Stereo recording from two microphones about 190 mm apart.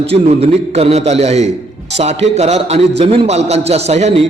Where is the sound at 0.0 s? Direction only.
30° right (ahead or behind).